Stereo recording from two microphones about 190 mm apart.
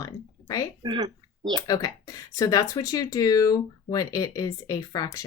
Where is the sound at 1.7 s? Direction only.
20° left (ahead or behind).